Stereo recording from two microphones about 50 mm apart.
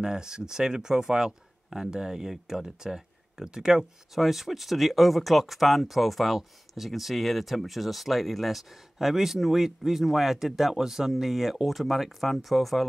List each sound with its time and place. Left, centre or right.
0.0 s speech: centre